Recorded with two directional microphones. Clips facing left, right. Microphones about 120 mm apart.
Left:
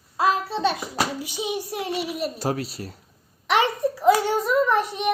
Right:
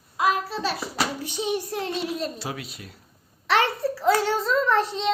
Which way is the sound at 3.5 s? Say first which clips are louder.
Left 1 dB; 15° left (ahead or behind).